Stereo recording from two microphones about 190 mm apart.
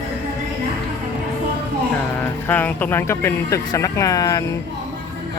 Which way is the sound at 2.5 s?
10° left (ahead or behind).